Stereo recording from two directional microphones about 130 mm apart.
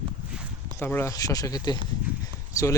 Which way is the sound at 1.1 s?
30° left (ahead or behind).